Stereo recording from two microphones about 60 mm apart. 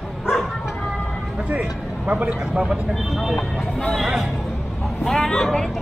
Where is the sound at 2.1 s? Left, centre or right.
Right.